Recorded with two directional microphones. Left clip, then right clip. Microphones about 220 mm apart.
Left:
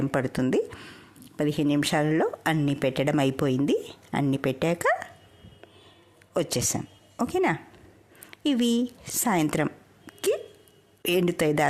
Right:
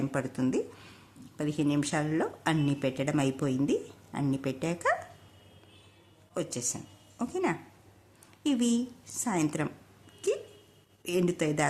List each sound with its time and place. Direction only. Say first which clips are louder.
0.1 s speech: left 6 dB; 35° left (ahead or behind)
6.3 s a woman's voice: left 8 dB; 35° left (ahead or behind)
10.2 s hiccup: left 5 dB; 40° left (ahead or behind)
11.0 s speech: left 6 dB; 35° left (ahead or behind)